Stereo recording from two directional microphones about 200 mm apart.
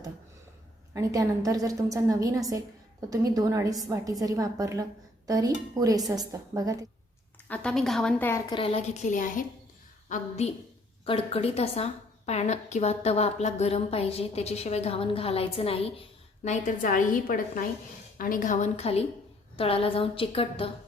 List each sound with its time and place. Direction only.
0.9 s a woman's voice: 15° right (ahead or behind)
7.4 s a woman's voice: 5° left (ahead or behind)
8.4 s a woman's voice: 25° left (ahead or behind)